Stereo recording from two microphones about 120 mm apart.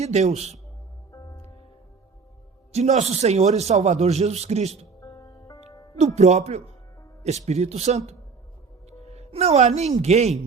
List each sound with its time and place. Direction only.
0.0 s speech: 70° right (ahead or behind)
1.1 s music: 25° left (ahead or behind)
2.7 s speech: 65° right (ahead or behind)
4.9 s music: 30° left (ahead or behind)
6.0 s speech: 65° right (ahead or behind)
8.9 s music: 60° right (ahead or behind)
10.0 s speech: 65° right (ahead or behind)